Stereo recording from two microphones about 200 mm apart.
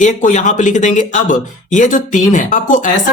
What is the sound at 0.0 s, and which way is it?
Speech, 40° left (ahead or behind).